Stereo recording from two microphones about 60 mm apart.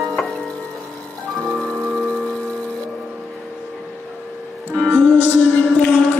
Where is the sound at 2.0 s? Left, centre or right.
Centre.